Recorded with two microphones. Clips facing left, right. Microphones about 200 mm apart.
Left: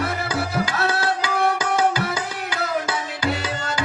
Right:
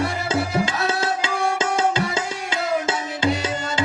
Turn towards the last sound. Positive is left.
turn(degrees=-25)  # may be behind; listen again after turning